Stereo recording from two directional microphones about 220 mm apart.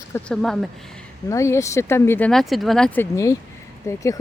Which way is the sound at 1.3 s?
15° left (ahead or behind).